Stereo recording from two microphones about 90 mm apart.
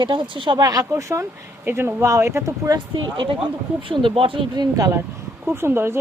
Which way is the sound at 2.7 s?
65° right (ahead or behind).